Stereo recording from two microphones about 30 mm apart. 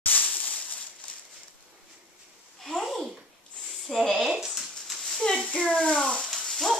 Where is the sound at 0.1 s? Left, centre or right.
Left.